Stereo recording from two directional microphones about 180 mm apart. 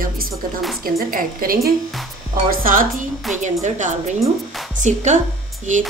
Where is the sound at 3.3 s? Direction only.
Centre (ahead or behind).